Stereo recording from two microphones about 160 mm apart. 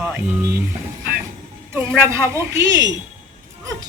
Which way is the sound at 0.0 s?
Centre (ahead or behind).